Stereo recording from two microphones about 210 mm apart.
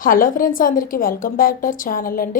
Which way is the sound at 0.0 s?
40° left (ahead or behind).